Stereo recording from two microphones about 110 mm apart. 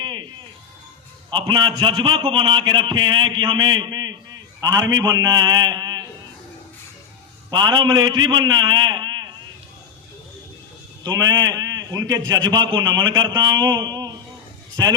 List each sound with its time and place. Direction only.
0.0 s music: 45° right (ahead or behind)
1.3 s a man's voice: 45° right (ahead or behind)
7.5 s a man's voice: 45° right (ahead or behind)
11.0 s a man's voice: 35° right (ahead or behind)